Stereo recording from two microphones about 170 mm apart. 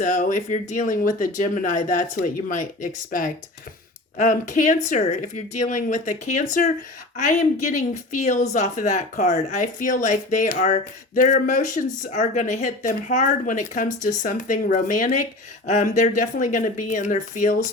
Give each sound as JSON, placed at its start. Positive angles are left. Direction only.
{"t": 0.0, "sound": "speech", "side_deg": 50}